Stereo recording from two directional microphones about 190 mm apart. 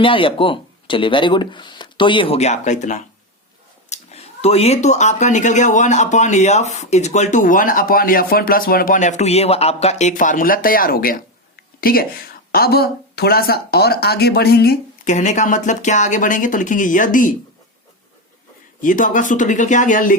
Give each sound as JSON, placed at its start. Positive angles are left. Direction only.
{"t": 0.0, "sound": "a woman's voice", "side_deg": 25}
{"t": 15.0, "sound": "speech", "side_deg": 40}
{"t": 18.8, "sound": "speech", "side_deg": 45}